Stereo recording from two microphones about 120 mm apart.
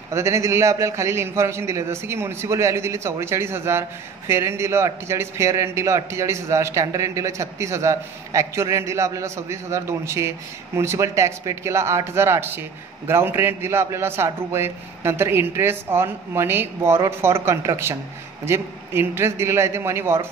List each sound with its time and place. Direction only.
0.1 s speech: 25° right (ahead or behind)